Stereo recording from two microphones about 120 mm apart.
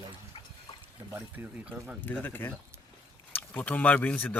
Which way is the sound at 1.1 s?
15° right (ahead or behind).